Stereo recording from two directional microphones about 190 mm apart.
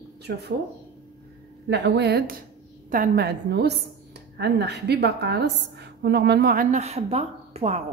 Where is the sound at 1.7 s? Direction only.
60° right (ahead or behind); by 7.8 s 35° right (ahead or behind).